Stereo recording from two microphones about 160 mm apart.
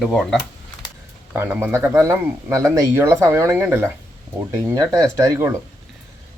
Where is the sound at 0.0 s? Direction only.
Centre (ahead or behind).